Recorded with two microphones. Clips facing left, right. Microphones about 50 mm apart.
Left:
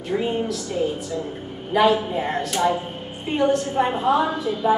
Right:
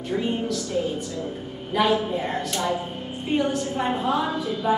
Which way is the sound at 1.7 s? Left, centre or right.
Centre.